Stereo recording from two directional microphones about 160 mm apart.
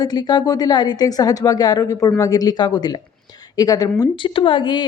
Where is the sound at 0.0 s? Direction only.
25° left (ahead or behind).